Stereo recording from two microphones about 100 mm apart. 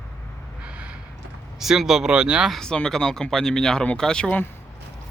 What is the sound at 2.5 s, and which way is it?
Speech, 5° left (ahead or behind).